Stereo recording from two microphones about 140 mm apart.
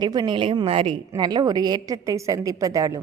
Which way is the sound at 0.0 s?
30° right (ahead or behind).